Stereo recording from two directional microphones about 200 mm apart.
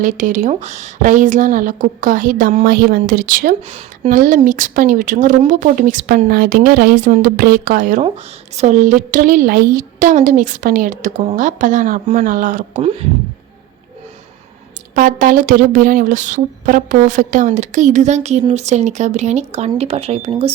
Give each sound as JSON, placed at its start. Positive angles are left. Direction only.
{"t": 0.0, "sound": "a woman's voice", "side_deg": -40}
{"t": 3.6, "sound": "speech", "side_deg": -30}
{"t": 4.1, "sound": "a woman's voice", "side_deg": -40}
{"t": 14.9, "sound": "a woman's voice", "side_deg": -40}